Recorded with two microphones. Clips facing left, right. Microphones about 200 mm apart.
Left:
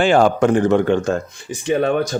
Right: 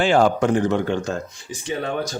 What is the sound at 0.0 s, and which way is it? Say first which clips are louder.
A man's voice: left 3 dB; 55° left (ahead or behind).